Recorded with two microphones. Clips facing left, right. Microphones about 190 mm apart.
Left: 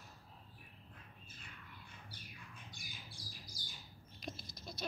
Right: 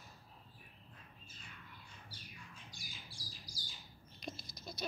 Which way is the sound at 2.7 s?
55° left (ahead or behind).